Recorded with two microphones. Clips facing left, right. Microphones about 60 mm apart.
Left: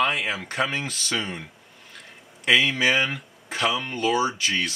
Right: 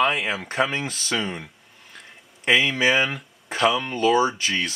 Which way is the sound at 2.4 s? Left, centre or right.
Centre.